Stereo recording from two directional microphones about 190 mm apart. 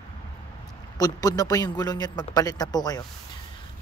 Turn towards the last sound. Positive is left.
turn(degrees=20)  # may be behind; listen again after turning